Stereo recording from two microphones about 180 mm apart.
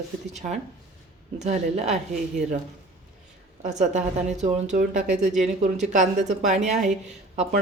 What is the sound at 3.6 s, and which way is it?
Speech, 40° right (ahead or behind).